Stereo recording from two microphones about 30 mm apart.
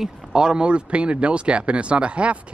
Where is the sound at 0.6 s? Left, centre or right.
Right.